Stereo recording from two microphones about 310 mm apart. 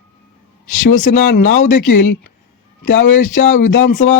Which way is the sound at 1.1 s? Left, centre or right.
Left.